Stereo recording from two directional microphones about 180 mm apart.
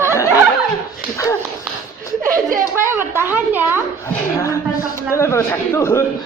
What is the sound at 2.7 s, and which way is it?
A child's voice, 15° right (ahead or behind).